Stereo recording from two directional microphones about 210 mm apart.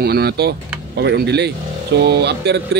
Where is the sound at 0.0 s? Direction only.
50° right (ahead or behind).